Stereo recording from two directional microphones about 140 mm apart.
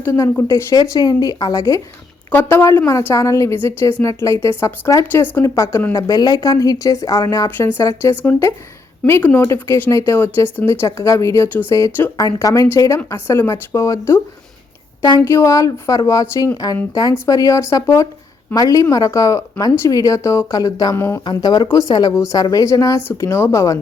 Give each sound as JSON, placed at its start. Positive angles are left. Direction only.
{"t": 0.0, "sound": "a woman's voice", "side_deg": 20}
{"t": 15.2, "sound": "speech", "side_deg": 20}